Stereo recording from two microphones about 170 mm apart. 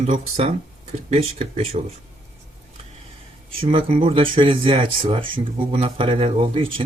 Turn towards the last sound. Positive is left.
turn(degrees=-30)  # may be behind; listen again after turning